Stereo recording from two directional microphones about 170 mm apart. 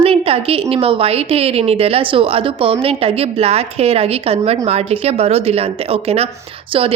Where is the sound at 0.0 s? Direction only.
35° right (ahead or behind).